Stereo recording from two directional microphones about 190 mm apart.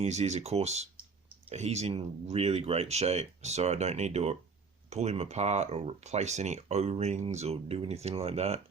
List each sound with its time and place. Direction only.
0.0 s speech: 35° right (ahead or behind)